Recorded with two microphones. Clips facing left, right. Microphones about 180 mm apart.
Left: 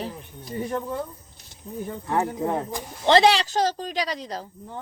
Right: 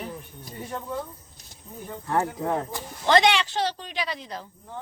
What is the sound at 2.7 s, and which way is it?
Speech, 25° left (ahead or behind).